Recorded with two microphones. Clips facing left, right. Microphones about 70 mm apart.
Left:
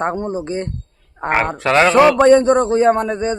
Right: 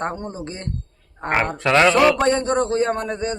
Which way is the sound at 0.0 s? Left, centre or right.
Left.